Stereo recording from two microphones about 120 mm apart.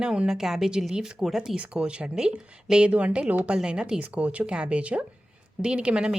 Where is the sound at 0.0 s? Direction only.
5° right (ahead or behind).